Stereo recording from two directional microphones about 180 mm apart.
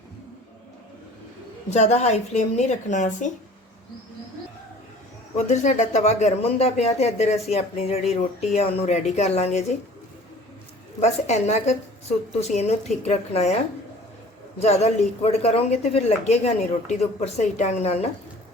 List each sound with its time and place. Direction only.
1.7 s speech: 40° left (ahead or behind)
5.5 s speech: 40° left (ahead or behind)
11.0 s speech: 40° left (ahead or behind)
14.6 s speech: 35° left (ahead or behind)